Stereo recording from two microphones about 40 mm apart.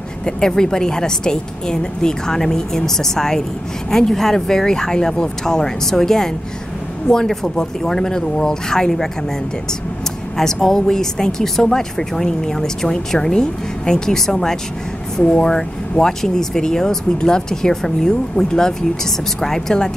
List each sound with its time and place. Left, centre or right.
0.2 s speech: centre
10.3 s speech: centre